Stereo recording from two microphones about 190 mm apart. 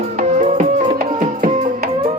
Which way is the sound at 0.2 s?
40° right (ahead or behind).